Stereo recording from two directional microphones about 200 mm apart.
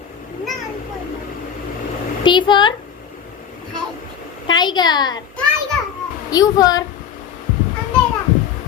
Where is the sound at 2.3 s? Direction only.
25° left (ahead or behind).